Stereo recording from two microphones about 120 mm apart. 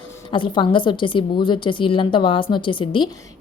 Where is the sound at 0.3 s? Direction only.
40° left (ahead or behind).